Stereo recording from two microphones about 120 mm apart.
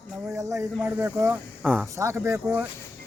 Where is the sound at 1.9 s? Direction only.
25° right (ahead or behind).